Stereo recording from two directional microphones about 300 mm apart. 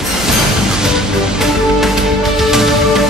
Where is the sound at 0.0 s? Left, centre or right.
Centre.